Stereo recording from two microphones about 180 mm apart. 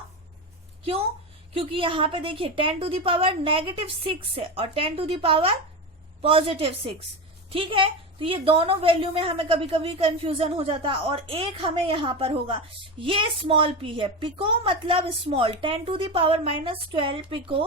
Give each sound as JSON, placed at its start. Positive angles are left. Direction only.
{"t": 1.5, "sound": "a woman's voice", "side_deg": -30}